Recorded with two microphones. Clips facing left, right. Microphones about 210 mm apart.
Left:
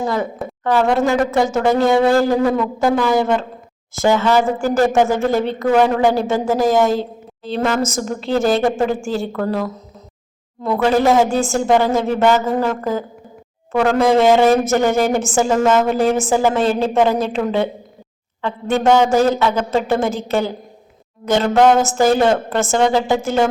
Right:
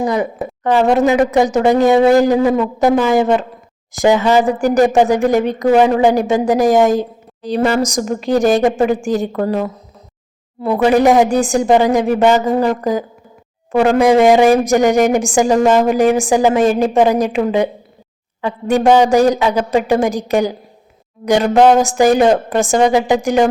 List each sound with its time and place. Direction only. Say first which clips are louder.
0.0 s a woman's voice: right 3 dB; 15° right (ahead or behind)